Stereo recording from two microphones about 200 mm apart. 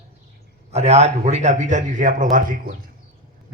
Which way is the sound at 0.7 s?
35° right (ahead or behind).